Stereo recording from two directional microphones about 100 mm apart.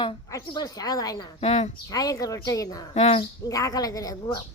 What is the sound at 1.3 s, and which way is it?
Speech, 90° left.